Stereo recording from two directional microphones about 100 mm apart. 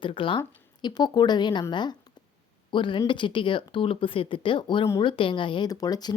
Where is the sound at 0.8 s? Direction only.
45° left (ahead or behind).